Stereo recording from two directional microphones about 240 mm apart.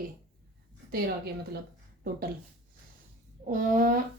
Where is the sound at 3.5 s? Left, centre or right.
Right.